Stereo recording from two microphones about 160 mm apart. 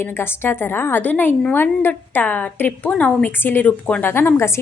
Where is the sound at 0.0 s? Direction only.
15° left (ahead or behind).